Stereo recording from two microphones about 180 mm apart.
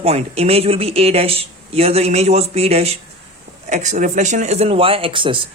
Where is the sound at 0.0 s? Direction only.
35° right (ahead or behind).